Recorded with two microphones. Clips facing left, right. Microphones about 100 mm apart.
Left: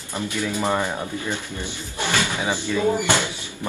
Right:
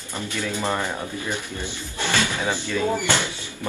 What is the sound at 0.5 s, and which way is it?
Speech, 15° left (ahead or behind).